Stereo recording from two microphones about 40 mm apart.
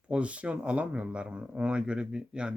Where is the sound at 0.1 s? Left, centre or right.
Right.